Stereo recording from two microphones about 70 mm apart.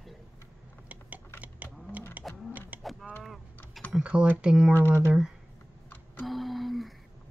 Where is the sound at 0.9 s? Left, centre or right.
Right.